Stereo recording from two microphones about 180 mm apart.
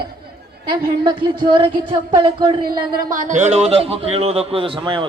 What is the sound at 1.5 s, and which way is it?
Music, 30° right (ahead or behind).